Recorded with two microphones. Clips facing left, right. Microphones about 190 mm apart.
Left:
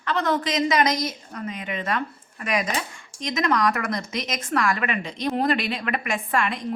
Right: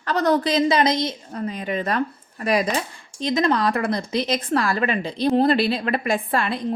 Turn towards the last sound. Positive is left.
turn(degrees=-35)  # may be behind; listen again after turning